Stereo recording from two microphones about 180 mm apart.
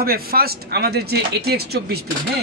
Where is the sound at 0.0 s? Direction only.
55° right (ahead or behind).